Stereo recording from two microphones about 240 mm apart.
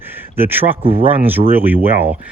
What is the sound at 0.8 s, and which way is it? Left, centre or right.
Speech, right.